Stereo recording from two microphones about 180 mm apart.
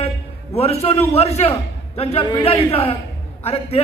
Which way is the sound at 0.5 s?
35° left (ahead or behind).